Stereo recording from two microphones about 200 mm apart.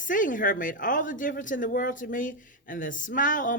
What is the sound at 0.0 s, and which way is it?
Speech, 40° left (ahead or behind).